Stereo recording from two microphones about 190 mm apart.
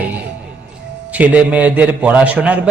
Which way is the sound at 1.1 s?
10° right (ahead or behind).